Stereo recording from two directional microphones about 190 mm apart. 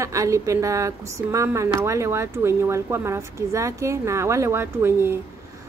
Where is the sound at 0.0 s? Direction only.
15° right (ahead or behind).